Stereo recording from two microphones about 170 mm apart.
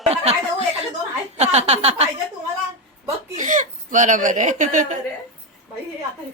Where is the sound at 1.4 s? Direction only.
40° right (ahead or behind).